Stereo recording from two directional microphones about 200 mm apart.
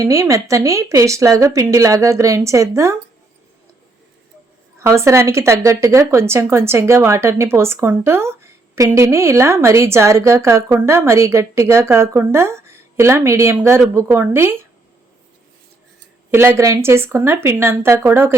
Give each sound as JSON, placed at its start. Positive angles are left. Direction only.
{"t": 0.0, "sound": "speech", "side_deg": -15}
{"t": 4.8, "sound": "speech", "side_deg": -15}
{"t": 16.3, "sound": "speech", "side_deg": -10}